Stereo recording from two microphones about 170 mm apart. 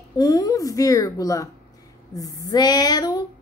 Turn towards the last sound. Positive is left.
turn(degrees=25)  # may be behind; listen again after turning